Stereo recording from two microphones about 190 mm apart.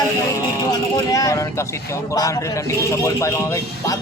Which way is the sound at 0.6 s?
20° left (ahead or behind).